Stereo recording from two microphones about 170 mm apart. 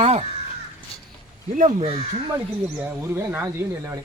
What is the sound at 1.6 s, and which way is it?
Speech, 40° right (ahead or behind).